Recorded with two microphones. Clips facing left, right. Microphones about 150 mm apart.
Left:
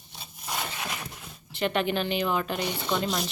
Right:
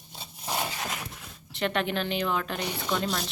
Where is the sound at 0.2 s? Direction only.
30° right (ahead or behind).